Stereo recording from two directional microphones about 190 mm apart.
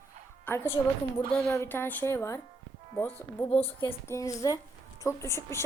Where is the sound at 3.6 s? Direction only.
10° left (ahead or behind).